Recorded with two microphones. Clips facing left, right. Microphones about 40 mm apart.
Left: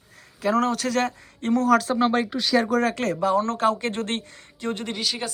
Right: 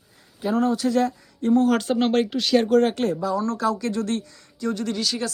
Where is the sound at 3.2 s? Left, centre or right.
Left.